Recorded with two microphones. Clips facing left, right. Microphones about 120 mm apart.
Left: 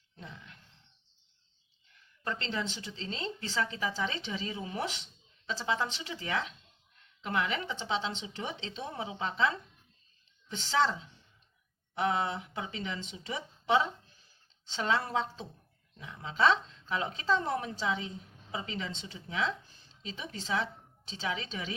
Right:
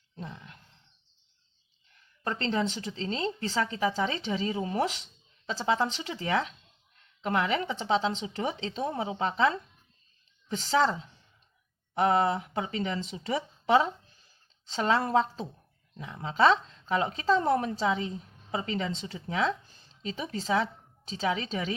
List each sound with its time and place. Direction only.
2.2 s speech: 45° right (ahead or behind)
10.6 s speech: 40° right (ahead or behind)
11.9 s a woman's voice: 45° right (ahead or behind)